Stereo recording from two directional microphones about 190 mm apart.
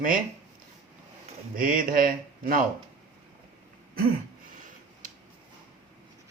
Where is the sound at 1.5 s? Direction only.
45° right (ahead or behind).